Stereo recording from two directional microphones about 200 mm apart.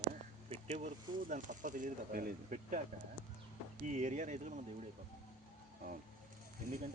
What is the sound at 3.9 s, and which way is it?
Speech, 35° right (ahead or behind).